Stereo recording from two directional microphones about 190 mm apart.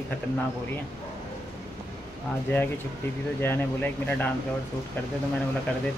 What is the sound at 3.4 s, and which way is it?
Speech, 10° left (ahead or behind).